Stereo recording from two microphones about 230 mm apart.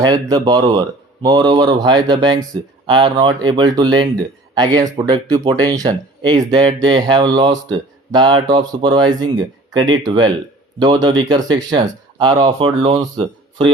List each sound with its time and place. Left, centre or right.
0.0 s a man's voice: centre